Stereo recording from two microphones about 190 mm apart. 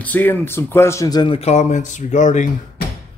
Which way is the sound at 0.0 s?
10° left (ahead or behind).